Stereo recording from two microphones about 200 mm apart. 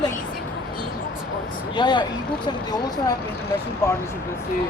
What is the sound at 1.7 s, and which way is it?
Speech, 25° left (ahead or behind).